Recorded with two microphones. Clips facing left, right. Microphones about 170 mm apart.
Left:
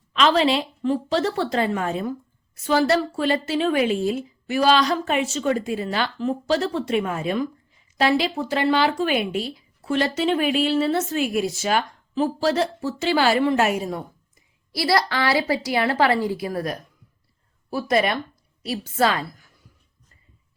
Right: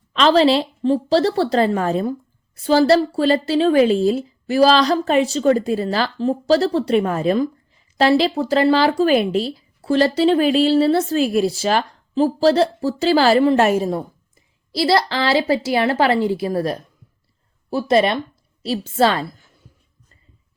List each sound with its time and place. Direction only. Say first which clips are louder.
0.1 s a woman's voice: right 5 dB; 35° right (ahead or behind)